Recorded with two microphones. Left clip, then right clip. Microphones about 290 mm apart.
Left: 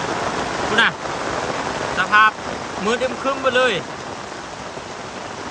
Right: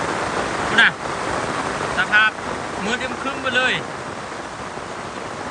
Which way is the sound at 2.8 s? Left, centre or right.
Centre.